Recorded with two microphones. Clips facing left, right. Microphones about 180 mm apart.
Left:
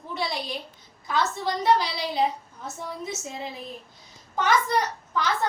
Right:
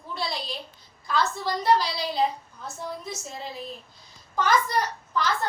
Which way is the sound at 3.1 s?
20° left (ahead or behind).